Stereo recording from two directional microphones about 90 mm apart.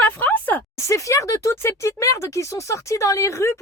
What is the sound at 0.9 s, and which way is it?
Speech, 35° left (ahead or behind).